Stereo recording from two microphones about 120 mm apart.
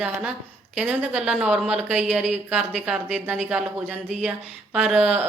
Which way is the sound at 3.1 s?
10° right (ahead or behind).